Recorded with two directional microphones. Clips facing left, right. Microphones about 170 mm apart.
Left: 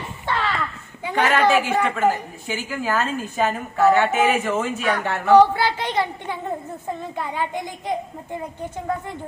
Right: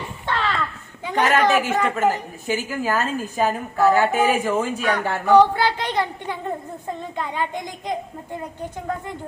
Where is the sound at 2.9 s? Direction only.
10° right (ahead or behind).